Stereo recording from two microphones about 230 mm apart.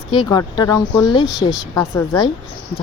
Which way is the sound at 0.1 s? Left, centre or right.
Centre.